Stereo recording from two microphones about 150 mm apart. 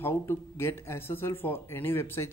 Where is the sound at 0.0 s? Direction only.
15° left (ahead or behind).